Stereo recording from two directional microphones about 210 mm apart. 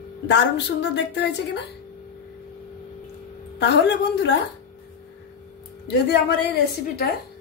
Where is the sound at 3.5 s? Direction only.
55° left (ahead or behind).